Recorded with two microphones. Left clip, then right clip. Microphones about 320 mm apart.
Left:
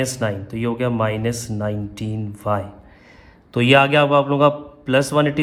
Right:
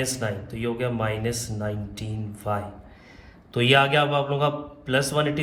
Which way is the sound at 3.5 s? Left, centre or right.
Left.